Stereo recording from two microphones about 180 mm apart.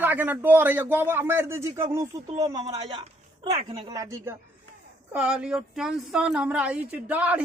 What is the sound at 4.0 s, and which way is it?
Speech, 15° right (ahead or behind).